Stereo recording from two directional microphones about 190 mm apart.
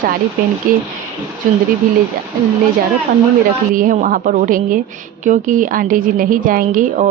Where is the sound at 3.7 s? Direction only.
45° right (ahead or behind).